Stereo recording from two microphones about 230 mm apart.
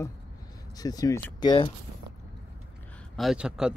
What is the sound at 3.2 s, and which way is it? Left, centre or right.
Speech, centre.